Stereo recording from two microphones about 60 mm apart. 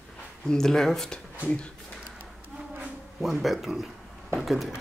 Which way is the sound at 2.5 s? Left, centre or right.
Right.